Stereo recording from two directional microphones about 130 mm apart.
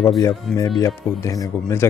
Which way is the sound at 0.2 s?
25° left (ahead or behind).